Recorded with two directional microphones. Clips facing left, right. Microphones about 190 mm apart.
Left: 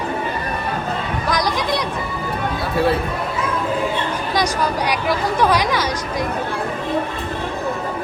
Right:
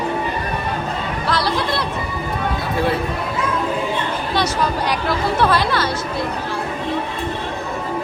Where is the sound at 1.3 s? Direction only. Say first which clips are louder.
Even; 15° left (ahead or behind).